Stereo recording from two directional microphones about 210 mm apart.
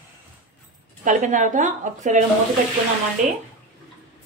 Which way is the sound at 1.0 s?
35° right (ahead or behind).